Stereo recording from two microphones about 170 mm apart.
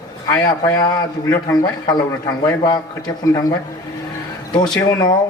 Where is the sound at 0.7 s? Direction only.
20° left (ahead or behind).